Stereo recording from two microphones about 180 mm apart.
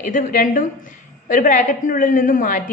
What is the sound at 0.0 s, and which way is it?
A woman's voice, 45° left (ahead or behind).